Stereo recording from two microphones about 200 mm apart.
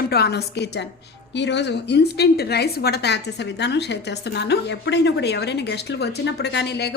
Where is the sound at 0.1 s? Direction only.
55° left (ahead or behind).